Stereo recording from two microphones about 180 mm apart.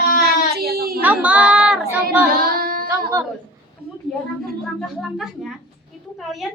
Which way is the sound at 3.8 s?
60° right (ahead or behind).